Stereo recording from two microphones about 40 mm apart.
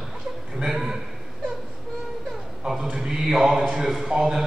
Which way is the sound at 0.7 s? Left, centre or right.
Centre.